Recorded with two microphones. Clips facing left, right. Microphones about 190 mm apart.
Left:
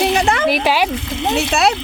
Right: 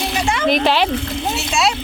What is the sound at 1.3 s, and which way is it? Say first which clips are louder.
Speech: left 5 dB; 55° left (ahead or behind).